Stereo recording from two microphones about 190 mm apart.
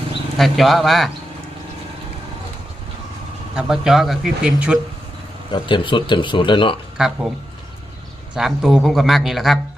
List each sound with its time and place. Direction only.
0.3 s speech: centre (ahead or behind)
3.5 s speech: 5° right (ahead or behind)
5.5 s speech: 25° left (ahead or behind)
6.9 s speech: 5° right (ahead or behind)
8.4 s speech: centre (ahead or behind)